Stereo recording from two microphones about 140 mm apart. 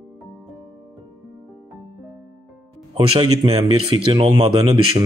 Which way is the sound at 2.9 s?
35° right (ahead or behind).